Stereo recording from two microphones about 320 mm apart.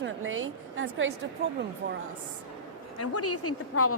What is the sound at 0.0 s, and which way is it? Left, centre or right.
A woman's voice, right.